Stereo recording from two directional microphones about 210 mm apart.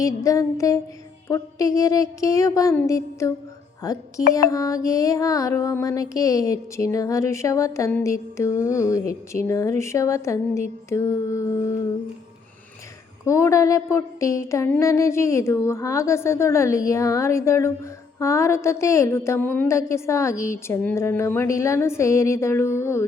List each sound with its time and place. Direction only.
0.0 s music: 15° left (ahead or behind)
4.4 s music: 15° left (ahead or behind)
13.2 s music: 15° left (ahead or behind)